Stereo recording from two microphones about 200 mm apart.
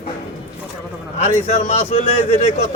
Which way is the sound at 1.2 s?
30° left (ahead or behind).